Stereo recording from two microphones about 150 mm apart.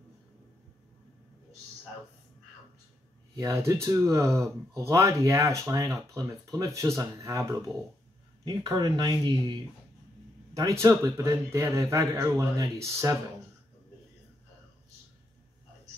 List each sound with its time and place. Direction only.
3.3 s a man's voice: 20° right (ahead or behind)